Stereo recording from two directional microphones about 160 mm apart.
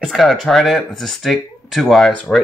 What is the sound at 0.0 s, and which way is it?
Speech, centre (ahead or behind).